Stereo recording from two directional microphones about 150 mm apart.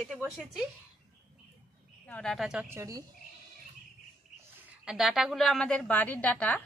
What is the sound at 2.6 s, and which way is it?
Speech, 20° right (ahead or behind).